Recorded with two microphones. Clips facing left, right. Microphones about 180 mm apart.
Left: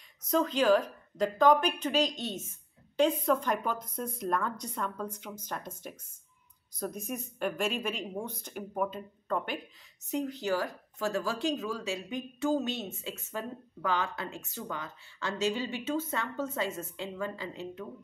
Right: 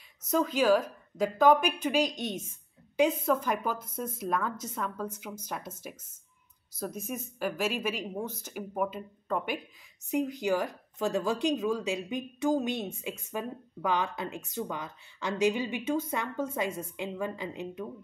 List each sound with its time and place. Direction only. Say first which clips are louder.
0.3 s a woman's voice: even; 5° right (ahead or behind)
6.8 s a woman's voice: even; centre (ahead or behind)